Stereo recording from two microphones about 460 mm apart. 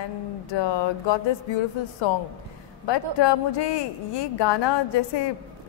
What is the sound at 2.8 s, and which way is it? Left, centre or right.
Speech, left.